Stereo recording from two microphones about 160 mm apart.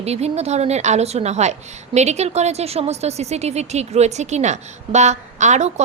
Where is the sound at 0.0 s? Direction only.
40° right (ahead or behind).